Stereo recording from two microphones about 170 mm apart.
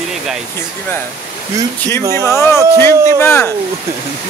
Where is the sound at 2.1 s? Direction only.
15° left (ahead or behind).